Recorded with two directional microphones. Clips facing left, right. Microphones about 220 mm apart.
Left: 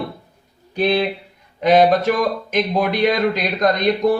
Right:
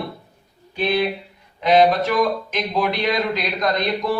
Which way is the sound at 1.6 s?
50° left (ahead or behind).